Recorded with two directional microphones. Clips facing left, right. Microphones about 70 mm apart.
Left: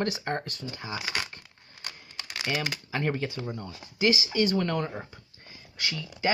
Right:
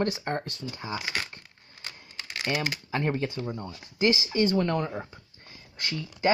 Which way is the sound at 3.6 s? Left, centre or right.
Right.